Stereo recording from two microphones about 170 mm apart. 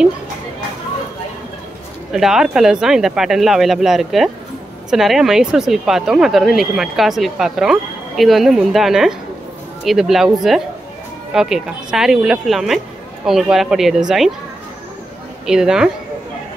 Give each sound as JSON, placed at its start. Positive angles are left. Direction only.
{"t": 2.1, "sound": "speech", "side_deg": -5}
{"t": 15.4, "sound": "speech", "side_deg": -5}